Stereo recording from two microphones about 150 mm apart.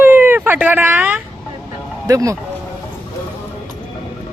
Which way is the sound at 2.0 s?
20° right (ahead or behind).